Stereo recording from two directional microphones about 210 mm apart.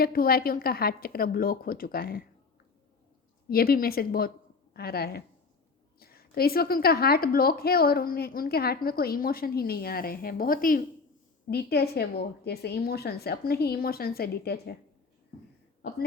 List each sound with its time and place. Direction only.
0.0 s a woman's voice: 45° left (ahead or behind)
3.5 s a woman's voice: 45° left (ahead or behind)